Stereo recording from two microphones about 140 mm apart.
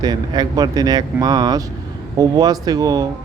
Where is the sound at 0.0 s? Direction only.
30° right (ahead or behind).